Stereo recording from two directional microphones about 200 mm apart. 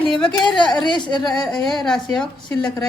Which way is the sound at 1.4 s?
Centre (ahead or behind).